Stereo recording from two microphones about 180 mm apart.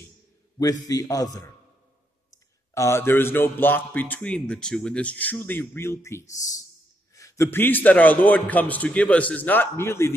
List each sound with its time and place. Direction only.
0.8 s a man's voice: 20° left (ahead or behind)
2.7 s a man's voice: 15° left (ahead or behind)